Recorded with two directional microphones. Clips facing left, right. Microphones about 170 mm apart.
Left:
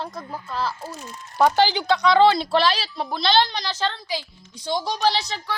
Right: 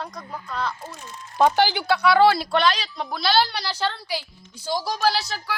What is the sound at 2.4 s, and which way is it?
Speech, 30° left (ahead or behind).